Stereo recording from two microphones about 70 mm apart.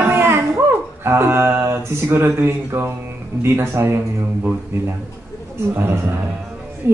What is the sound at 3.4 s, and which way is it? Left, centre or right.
Speech, right.